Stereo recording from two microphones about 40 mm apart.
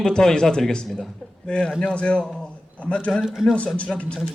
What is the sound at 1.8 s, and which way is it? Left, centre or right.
Speech, left.